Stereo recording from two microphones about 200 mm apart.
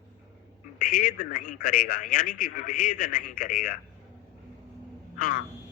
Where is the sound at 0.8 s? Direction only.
45° left (ahead or behind).